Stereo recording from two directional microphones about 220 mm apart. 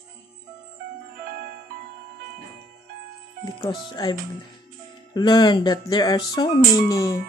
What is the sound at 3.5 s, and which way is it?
Speech, 20° left (ahead or behind).